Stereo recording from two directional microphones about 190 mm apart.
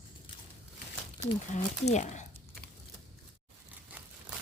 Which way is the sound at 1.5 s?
40° left (ahead or behind).